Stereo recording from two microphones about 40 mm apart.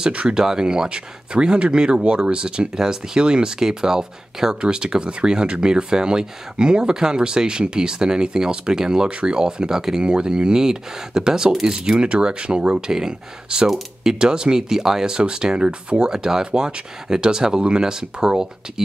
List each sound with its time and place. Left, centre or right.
0.0 s speech: right
16.1 s speech: centre